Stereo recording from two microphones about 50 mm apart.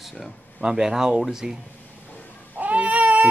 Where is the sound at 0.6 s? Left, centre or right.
Centre.